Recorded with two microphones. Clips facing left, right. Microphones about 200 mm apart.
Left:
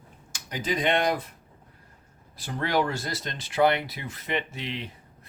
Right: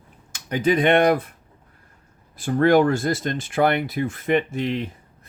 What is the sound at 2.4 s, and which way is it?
Speech, 50° right (ahead or behind).